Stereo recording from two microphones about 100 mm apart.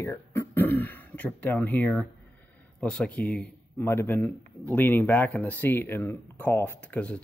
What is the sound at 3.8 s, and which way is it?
Speech, 25° left (ahead or behind).